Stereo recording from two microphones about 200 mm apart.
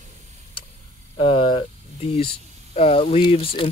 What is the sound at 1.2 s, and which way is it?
Speech, 25° left (ahead or behind).